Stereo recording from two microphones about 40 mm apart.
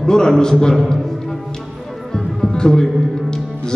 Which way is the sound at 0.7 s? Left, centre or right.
Centre.